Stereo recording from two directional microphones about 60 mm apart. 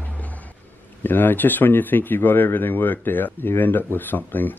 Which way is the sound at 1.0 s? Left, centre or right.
Left.